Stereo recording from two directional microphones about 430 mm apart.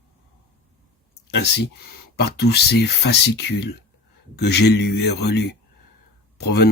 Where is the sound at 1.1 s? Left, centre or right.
Left.